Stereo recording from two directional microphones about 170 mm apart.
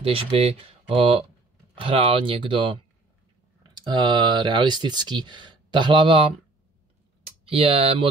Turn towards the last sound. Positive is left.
turn(degrees=-35)  # may be behind; listen again after turning